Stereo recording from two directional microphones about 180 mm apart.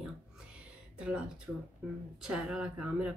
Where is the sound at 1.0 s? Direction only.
5° right (ahead or behind).